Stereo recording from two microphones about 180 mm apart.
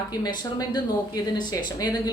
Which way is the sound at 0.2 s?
20° left (ahead or behind).